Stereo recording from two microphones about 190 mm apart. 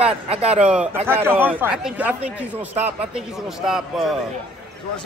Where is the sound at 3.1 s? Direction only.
Centre (ahead or behind).